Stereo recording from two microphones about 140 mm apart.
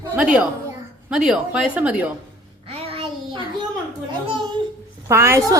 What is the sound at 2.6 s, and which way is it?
Child singing, 45° right (ahead or behind).